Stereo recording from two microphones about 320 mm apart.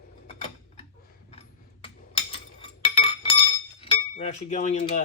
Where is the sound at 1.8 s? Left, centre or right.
Centre.